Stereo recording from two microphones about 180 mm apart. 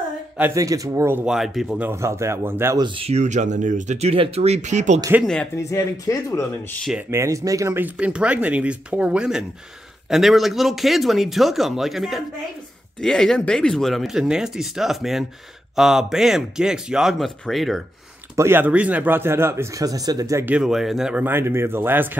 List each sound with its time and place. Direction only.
0.4 s speech: 20° right (ahead or behind); by 1.9 s centre (ahead or behind)
1.9 s speech: 15° right (ahead or behind)
2.8 s speech: 30° right (ahead or behind)
5.2 s speech: 5° left (ahead or behind)
5.6 s speech: 15° left (ahead or behind)
6.8 s speech: 5° right (ahead or behind)
7.1 s speech: 15° right (ahead or behind); by 17.8 s centre (ahead or behind)
18.3 s speech: 15° right (ahead or behind)